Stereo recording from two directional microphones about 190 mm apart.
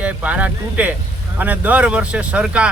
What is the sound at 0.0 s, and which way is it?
Speech, 5° right (ahead or behind).